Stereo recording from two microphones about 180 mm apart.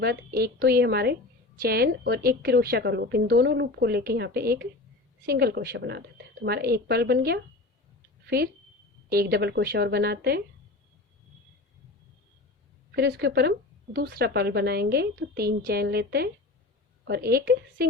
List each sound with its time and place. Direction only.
0.0 s a woman's voice: 60° right (ahead or behind)
9.0 s a woman's voice: 60° right (ahead or behind)
13.0 s a woman's voice: 60° right (ahead or behind)